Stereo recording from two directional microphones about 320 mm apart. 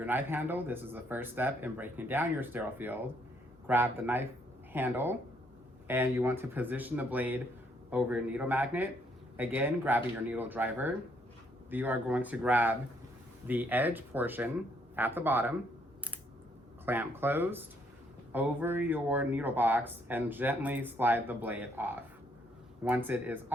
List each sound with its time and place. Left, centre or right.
0.0 s speech: centre
16.8 s speech: centre